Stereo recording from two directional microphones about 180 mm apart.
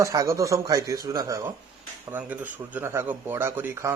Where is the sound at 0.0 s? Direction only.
15° right (ahead or behind).